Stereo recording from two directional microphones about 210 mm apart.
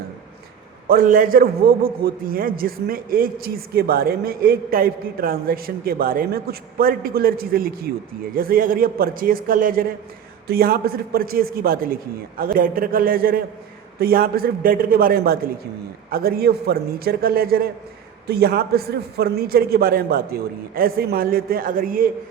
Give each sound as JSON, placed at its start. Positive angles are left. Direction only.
{"t": 0.9, "sound": "a man's voice", "side_deg": -40}